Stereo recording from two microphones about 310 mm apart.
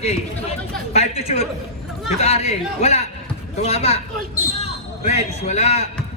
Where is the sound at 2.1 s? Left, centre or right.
Centre.